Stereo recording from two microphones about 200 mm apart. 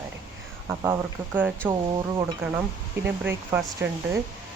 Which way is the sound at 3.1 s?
10° right (ahead or behind).